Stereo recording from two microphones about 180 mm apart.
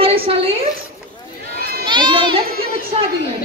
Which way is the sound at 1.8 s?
25° right (ahead or behind).